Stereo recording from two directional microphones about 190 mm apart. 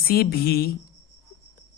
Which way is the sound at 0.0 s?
55° left (ahead or behind).